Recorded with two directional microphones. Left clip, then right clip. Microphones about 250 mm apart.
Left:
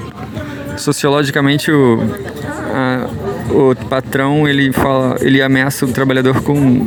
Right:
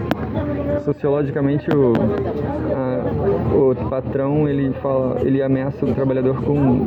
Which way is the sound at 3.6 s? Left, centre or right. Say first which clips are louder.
Left 5 dB; left.